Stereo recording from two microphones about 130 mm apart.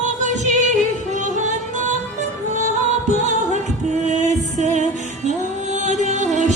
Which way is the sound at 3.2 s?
65° right (ahead or behind).